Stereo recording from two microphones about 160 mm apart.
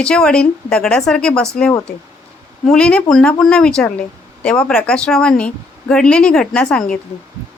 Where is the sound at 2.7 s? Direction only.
5° left (ahead or behind).